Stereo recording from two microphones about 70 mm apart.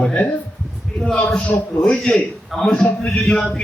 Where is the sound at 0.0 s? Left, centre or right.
Centre.